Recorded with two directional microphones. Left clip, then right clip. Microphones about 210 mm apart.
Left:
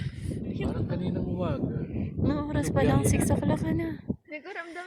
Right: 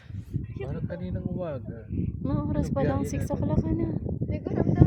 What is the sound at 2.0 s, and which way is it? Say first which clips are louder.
Speech: left 2 dB; 5° right (ahead or behind).